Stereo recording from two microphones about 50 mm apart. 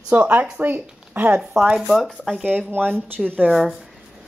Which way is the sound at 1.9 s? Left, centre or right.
Centre.